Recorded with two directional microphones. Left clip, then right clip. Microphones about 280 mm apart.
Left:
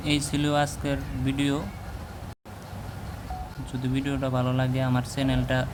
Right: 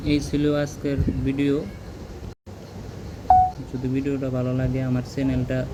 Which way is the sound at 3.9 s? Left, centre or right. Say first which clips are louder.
Right 2 dB; centre.